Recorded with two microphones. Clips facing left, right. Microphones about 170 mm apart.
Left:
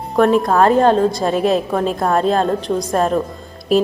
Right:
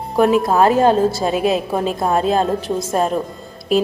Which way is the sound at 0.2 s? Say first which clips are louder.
Left 1 dB; 5° right (ahead or behind).